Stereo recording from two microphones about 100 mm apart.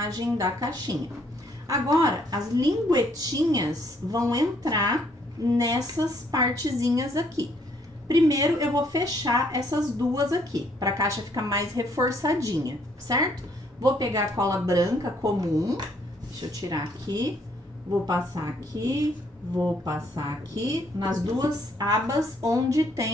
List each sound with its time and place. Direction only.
0.0 s a woman's voice: 40° right (ahead or behind)